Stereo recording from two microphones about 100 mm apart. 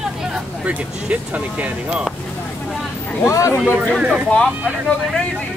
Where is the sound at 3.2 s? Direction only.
30° left (ahead or behind).